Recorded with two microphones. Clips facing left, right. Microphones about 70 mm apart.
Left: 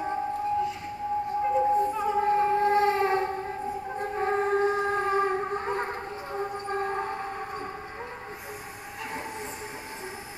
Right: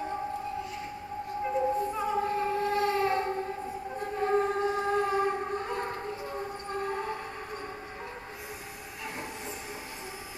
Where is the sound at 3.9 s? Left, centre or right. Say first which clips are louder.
Even; left.